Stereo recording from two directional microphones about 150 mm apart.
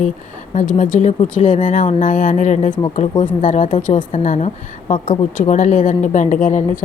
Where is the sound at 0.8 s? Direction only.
60° left (ahead or behind).